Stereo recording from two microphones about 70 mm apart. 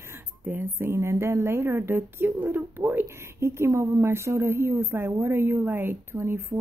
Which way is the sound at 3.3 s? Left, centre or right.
Right.